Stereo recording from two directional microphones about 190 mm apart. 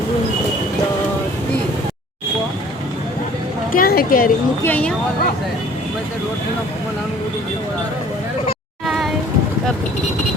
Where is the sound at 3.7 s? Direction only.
50° left (ahead or behind).